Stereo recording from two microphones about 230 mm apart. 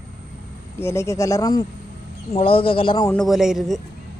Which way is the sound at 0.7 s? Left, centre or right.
Centre.